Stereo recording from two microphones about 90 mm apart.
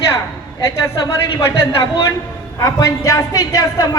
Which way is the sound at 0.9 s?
45° left (ahead or behind).